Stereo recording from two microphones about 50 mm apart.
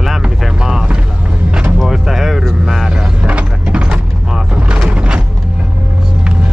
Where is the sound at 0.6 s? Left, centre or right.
Centre.